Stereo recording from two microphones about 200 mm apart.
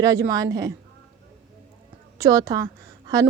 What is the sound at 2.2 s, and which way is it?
A woman's voice, 15° right (ahead or behind).